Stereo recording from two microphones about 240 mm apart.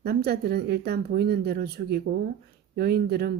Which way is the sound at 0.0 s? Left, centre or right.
Right.